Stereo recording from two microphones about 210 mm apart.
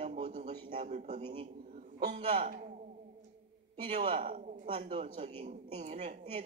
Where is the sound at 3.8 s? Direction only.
30° right (ahead or behind).